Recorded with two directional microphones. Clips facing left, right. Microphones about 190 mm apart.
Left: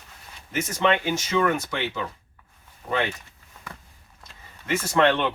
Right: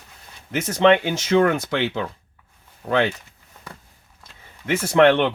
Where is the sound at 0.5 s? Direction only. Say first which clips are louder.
Right 7 dB; 65° right (ahead or behind).